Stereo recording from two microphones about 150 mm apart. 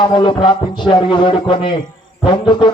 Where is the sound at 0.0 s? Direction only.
30° left (ahead or behind).